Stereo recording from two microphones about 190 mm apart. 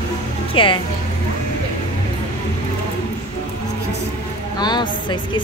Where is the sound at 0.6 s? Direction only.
30° left (ahead or behind).